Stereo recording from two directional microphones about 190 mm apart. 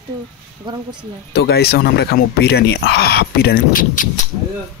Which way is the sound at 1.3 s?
55° left (ahead or behind).